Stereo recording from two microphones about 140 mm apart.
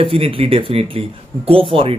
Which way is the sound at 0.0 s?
40° right (ahead or behind).